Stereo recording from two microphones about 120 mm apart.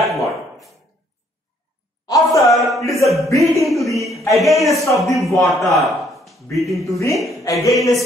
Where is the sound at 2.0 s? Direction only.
25° left (ahead or behind).